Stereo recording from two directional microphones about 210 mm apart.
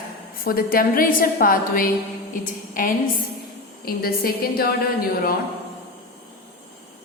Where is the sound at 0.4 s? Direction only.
45° left (ahead or behind).